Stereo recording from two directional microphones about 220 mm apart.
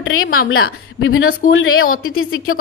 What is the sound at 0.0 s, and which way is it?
A woman's voice, 70° left (ahead or behind).